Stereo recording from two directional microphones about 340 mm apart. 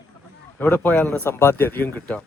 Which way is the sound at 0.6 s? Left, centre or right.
Centre.